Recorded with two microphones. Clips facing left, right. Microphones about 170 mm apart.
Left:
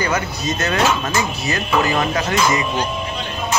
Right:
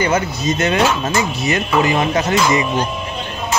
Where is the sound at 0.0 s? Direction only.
20° right (ahead or behind).